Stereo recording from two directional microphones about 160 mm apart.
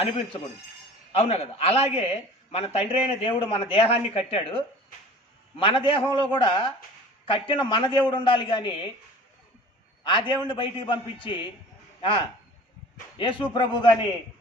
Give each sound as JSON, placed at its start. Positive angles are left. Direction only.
{"t": 1.1, "sound": "speech", "side_deg": 40}
{"t": 10.0, "sound": "a man's voice", "side_deg": 30}